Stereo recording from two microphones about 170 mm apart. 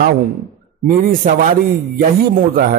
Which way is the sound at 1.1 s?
50° right (ahead or behind).